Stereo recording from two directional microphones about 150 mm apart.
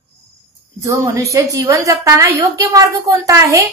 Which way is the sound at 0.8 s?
20° right (ahead or behind).